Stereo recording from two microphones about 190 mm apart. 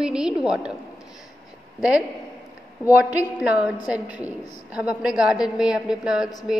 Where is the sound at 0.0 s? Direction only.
5° right (ahead or behind).